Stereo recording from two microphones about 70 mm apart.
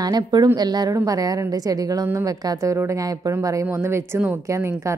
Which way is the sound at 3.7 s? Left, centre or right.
Right.